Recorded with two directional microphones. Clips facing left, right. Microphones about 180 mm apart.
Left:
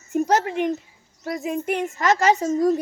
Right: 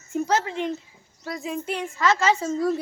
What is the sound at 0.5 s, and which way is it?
Speech, 15° left (ahead or behind).